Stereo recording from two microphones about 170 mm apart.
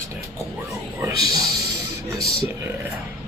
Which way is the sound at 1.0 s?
20° right (ahead or behind).